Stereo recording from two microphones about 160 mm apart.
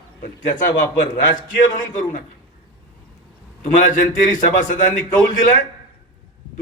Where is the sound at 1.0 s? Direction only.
55° left (ahead or behind).